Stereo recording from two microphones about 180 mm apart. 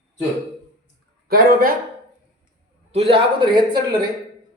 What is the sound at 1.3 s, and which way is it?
Speech, 55° right (ahead or behind).